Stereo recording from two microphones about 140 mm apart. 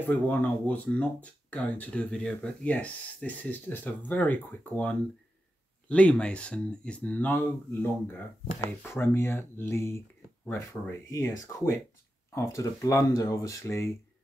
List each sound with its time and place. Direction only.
0.0 s speech: 10° left (ahead or behind)